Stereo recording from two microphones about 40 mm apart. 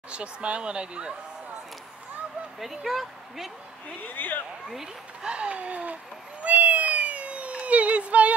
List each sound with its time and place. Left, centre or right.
0.1 s speech: right
2.6 s speech: centre
4.0 s speech: left
5.2 s speech: right
6.4 s cat: right